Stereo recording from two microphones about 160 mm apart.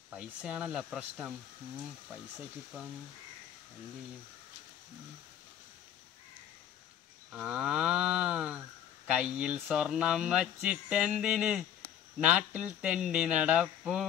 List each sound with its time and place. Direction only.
0.1 s speech: 5° right (ahead or behind)
7.3 s speech: 5° right (ahead or behind)